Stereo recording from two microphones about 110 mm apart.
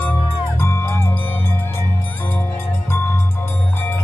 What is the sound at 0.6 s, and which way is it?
Music, 25° left (ahead or behind).